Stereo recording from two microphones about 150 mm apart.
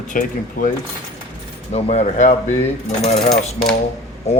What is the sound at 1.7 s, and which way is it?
Speech, 50° left (ahead or behind).